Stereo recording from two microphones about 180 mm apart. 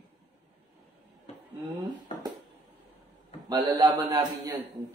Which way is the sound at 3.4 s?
20° right (ahead or behind).